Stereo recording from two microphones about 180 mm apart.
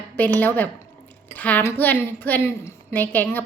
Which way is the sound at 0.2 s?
10° left (ahead or behind).